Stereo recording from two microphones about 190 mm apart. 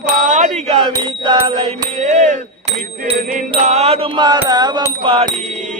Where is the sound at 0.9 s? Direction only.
25° right (ahead or behind).